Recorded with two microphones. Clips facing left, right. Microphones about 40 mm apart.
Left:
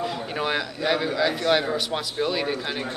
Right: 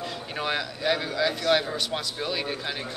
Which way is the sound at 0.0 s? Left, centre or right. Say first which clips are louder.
Left 4 dB; centre.